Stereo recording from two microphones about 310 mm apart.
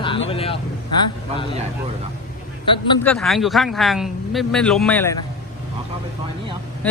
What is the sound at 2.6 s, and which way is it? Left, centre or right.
Speech, centre.